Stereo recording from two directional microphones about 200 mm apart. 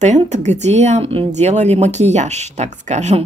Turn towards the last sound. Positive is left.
turn(degrees=-35)  # may be behind; listen again after turning